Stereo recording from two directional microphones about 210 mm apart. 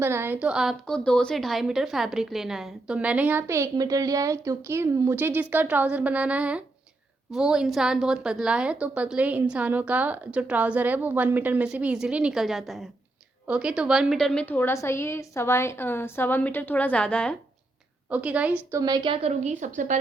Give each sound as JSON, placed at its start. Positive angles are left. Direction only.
{"t": 0.0, "sound": "a woman's voice", "side_deg": -10}
{"t": 18.1, "sound": "a woman's voice", "side_deg": -5}
{"t": 18.8, "sound": "a woman's voice", "side_deg": -20}